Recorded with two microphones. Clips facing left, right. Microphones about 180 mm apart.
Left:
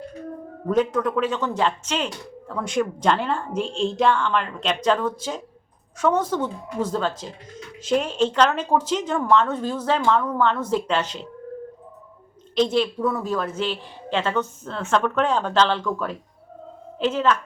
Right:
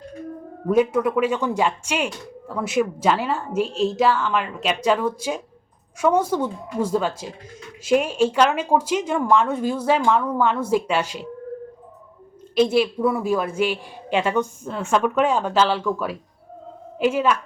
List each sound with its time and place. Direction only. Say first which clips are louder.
0.7 s a woman's voice: right 3 dB; 10° right (ahead or behind)
12.5 s a woman's voice: right 2 dB; 10° right (ahead or behind)